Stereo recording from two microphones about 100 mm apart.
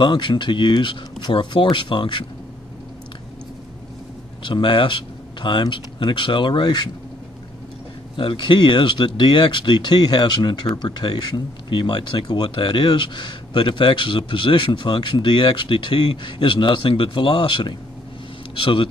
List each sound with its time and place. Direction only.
0.0 s speech: 50° left (ahead or behind)
4.4 s speech: 55° left (ahead or behind)
8.2 s speech: 55° left (ahead or behind)